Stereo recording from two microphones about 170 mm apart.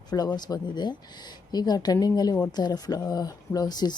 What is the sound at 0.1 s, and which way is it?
Speech, 25° left (ahead or behind).